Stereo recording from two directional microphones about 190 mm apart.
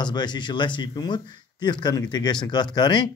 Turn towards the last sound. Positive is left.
turn(degrees=25)  # may be behind; listen again after turning